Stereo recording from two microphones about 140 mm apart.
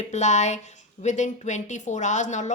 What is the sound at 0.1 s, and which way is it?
A woman's voice, 55° left (ahead or behind).